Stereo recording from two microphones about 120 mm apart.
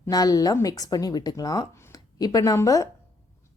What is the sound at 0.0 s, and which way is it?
Speech, 30° left (ahead or behind).